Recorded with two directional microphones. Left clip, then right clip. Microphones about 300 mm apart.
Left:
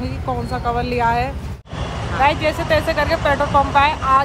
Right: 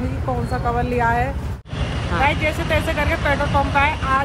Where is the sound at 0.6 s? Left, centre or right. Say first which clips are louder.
Left 1 dB; centre.